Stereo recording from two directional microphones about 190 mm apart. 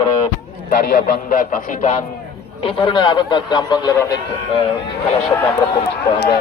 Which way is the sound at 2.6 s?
25° left (ahead or behind).